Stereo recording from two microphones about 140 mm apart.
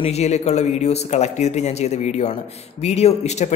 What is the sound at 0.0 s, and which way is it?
Speech, 50° left (ahead or behind).